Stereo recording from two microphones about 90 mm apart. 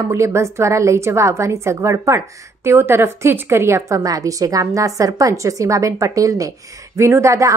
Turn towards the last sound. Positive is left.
turn(degrees=-35)  # may be behind; listen again after turning